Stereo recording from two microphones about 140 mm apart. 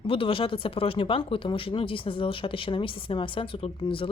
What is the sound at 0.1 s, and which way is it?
Speech, 40° left (ahead or behind).